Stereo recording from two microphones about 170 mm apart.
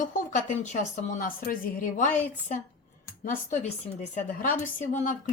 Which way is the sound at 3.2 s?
55° left (ahead or behind).